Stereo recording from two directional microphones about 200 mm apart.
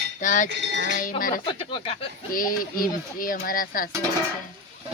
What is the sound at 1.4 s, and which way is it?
Speech, 25° left (ahead or behind).